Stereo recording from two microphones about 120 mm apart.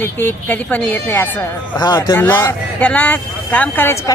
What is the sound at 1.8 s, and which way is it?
Speech, 40° left (ahead or behind).